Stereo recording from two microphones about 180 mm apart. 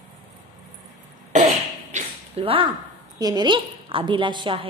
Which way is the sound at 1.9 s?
30° right (ahead or behind).